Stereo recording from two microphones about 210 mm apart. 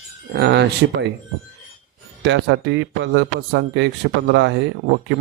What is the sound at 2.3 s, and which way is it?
Speech, 60° right (ahead or behind).